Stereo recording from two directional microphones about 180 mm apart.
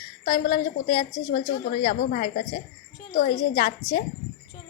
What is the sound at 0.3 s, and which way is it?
A woman's voice, 45° left (ahead or behind).